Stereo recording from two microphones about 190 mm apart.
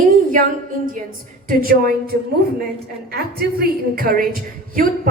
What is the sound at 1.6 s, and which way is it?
Speech, 50° right (ahead or behind).